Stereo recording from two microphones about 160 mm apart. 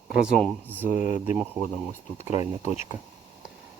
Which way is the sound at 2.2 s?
45° left (ahead or behind).